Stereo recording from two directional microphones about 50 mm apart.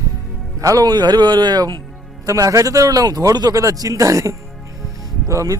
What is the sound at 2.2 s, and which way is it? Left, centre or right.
Speech, right.